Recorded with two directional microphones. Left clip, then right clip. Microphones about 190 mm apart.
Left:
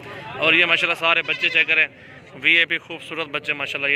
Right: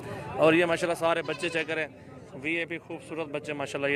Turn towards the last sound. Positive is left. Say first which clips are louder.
# left 7 dB
turn(degrees=-25)  # may be behind; listen again after turning